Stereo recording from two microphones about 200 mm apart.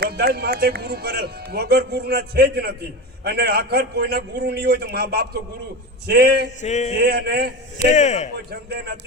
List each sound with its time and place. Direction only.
0.0 s speech: 50° right (ahead or behind)
6.6 s a man's voice: 35° left (ahead or behind)
7.0 s speech: 50° right (ahead or behind)
7.8 s a man's voice: 35° left (ahead or behind)
8.4 s speech: 55° right (ahead or behind)